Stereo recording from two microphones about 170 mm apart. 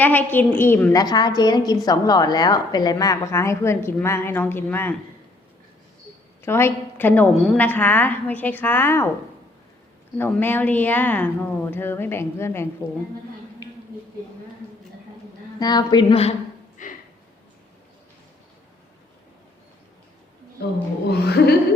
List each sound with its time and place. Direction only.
0.0 s a woman's voice: 10° left (ahead or behind)
6.4 s a woman's voice: 15° left (ahead or behind)
10.2 s a woman's voice: 10° left (ahead or behind)
15.5 s a woman's voice: 20° left (ahead or behind)
16.8 s a sound: 50° left (ahead or behind)
21.1 s music: 70° left (ahead or behind)